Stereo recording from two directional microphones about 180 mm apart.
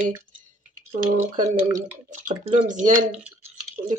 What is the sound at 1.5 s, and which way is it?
Speech, 15° right (ahead or behind).